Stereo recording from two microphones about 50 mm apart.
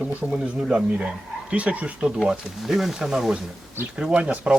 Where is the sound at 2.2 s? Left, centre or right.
Centre.